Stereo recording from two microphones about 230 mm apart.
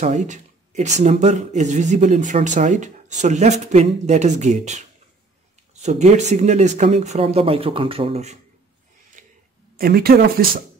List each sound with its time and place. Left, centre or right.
0.0 s speech: right
9.2 s a sound: right
9.8 s speech: right